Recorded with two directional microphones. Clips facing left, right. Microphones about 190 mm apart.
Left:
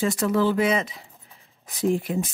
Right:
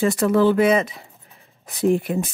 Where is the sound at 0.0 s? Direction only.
60° right (ahead or behind).